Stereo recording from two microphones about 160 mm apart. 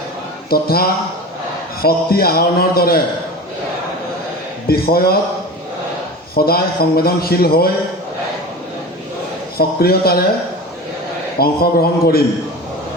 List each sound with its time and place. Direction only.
0.5 s a man's voice: 70° left (ahead or behind)
4.7 s a man's voice: 70° left (ahead or behind)
6.3 s a man's voice: 70° left (ahead or behind)
9.6 s a man's voice: 70° left (ahead or behind)
11.3 s a man's voice: 75° left (ahead or behind)